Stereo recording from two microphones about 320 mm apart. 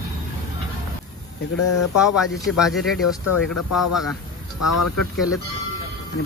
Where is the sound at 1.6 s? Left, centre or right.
Left.